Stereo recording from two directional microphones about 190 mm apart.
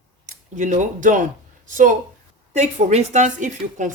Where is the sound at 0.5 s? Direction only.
40° right (ahead or behind).